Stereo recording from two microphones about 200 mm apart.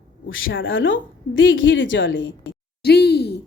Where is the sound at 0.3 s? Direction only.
80° left.